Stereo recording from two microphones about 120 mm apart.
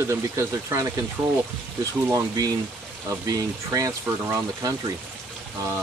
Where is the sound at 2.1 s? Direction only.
30° right (ahead or behind).